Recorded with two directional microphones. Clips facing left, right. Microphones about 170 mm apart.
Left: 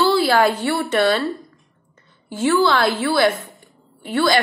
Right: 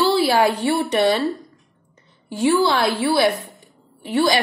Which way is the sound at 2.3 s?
25° right (ahead or behind).